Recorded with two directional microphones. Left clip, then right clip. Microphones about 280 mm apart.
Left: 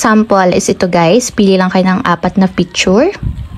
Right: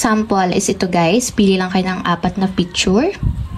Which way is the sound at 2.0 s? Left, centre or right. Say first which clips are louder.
Left 6 dB; right.